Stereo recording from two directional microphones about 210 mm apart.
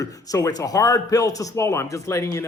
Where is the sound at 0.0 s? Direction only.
15° left (ahead or behind).